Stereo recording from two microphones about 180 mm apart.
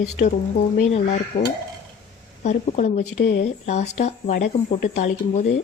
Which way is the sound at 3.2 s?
65° left (ahead or behind).